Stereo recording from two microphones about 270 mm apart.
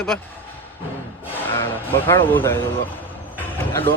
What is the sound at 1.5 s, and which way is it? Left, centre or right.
Speech, centre.